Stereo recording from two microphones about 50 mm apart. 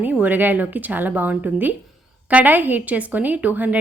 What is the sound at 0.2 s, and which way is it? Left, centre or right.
A woman's voice, right.